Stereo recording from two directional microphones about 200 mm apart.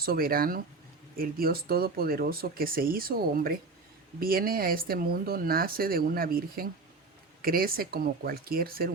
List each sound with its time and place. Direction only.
0.0 s speech: 50° right (ahead or behind)